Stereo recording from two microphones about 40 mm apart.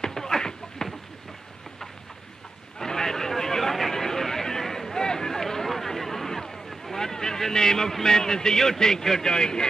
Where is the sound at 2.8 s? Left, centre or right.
Centre.